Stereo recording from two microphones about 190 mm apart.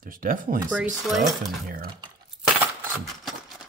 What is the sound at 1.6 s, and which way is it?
Speech, 45° right (ahead or behind).